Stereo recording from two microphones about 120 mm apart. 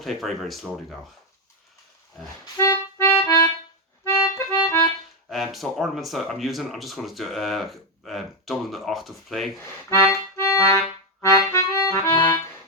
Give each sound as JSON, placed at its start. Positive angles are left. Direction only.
{"t": 0.0, "sound": "speech", "side_deg": 0}
{"t": 2.6, "sound": "music", "side_deg": 20}
{"t": 5.3, "sound": "speech", "side_deg": 0}
{"t": 9.6, "sound": "speech", "side_deg": 20}
{"t": 10.3, "sound": "music", "side_deg": 25}